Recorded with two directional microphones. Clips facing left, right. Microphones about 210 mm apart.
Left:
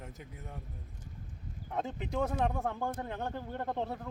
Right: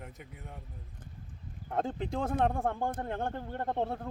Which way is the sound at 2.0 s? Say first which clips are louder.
Right 1 dB; 30° right (ahead or behind).